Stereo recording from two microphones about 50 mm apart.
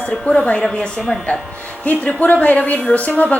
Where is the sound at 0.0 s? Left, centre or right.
Left.